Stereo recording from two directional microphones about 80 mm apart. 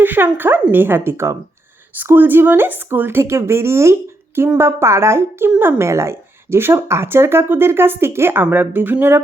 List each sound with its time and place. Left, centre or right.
0.0 s speech: right
2.0 s a woman's voice: right